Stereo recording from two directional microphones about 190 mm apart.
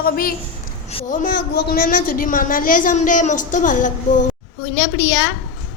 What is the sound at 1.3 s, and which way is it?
A woman's voice, 60° left (ahead or behind).